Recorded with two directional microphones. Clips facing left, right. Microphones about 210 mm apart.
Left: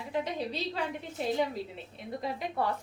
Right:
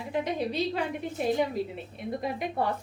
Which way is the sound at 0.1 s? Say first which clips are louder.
Right 4 dB; 15° right (ahead or behind).